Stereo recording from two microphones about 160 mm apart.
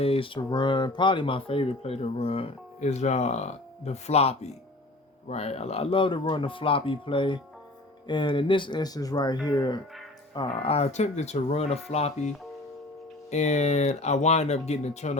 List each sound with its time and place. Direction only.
0.0 s speech: 35° left (ahead or behind)
13.3 s speech: 45° left (ahead or behind)